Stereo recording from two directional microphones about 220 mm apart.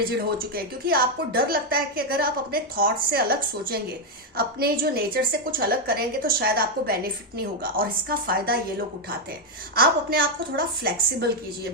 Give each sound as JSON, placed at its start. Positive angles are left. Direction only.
{"t": 0.3, "sound": "a woman's voice", "side_deg": -45}
{"t": 9.7, "sound": "a woman's voice", "side_deg": -45}